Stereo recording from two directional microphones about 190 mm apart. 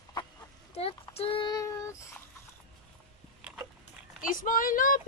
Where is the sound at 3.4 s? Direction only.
5° right (ahead or behind).